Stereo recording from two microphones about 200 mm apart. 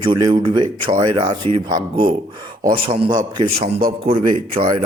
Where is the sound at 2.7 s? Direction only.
25° right (ahead or behind).